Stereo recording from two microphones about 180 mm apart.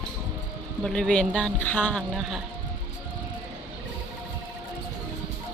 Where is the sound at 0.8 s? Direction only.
5° left (ahead or behind).